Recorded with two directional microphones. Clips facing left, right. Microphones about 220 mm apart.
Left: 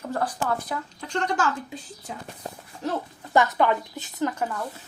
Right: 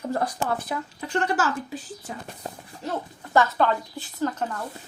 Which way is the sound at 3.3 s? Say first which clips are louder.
Even; 15° left (ahead or behind).